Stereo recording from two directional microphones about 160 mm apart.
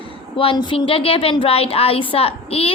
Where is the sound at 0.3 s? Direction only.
30° left (ahead or behind).